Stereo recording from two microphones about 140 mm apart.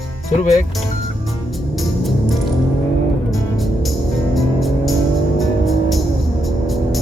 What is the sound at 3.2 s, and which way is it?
Music, centre (ahead or behind).